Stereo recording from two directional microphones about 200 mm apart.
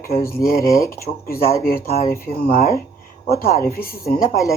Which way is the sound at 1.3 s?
50° left (ahead or behind).